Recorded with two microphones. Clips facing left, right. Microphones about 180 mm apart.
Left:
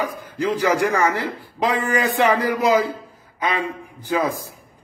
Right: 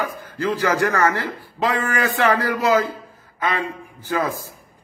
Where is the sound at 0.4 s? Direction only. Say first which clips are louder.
Left 1 dB; 10° left (ahead or behind).